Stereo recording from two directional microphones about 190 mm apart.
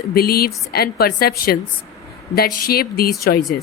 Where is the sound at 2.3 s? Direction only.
55° left (ahead or behind).